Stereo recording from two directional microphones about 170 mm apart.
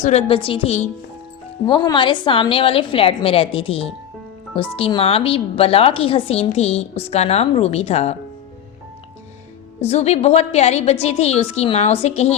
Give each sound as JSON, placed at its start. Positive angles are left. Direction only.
{"t": 0.0, "sound": "speech", "side_deg": 40}
{"t": 9.8, "sound": "speech", "side_deg": 40}